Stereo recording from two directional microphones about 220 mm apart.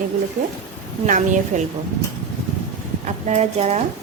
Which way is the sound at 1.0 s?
35° right (ahead or behind).